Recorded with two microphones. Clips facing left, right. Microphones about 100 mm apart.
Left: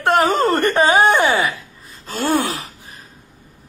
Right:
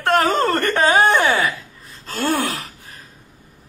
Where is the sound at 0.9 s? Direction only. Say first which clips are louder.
Even; 5° left (ahead or behind).